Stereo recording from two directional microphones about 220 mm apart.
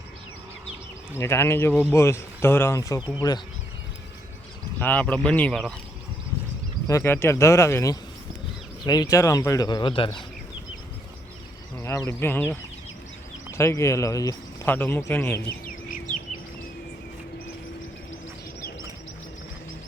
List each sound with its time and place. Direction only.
1.1 s speech: 10° left (ahead or behind)
4.8 s speech: 5° left (ahead or behind)
6.8 s a man's voice: 15° left (ahead or behind)
11.8 s speech: 5° left (ahead or behind)